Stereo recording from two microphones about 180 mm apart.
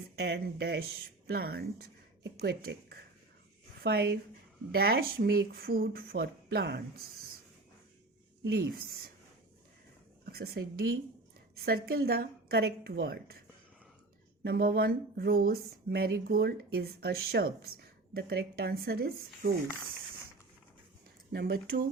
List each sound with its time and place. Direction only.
0.2 s speech: 70° right (ahead or behind)
10.3 s speech: 60° right (ahead or behind)
14.4 s speech: 60° right (ahead or behind)
21.3 s speech: 60° right (ahead or behind)